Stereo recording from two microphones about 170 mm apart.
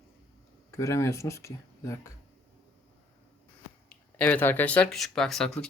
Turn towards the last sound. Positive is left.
turn(degrees=5)  # may be behind; listen again after turning